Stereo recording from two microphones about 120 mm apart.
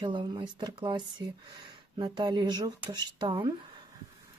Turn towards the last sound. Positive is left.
turn(degrees=-40)  # may be behind; listen again after turning